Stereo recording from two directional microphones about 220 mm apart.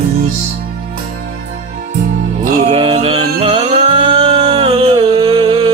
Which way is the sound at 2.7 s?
25° right (ahead or behind).